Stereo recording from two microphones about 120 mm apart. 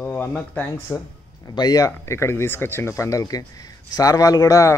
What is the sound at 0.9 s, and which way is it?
Speech, 25° left (ahead or behind).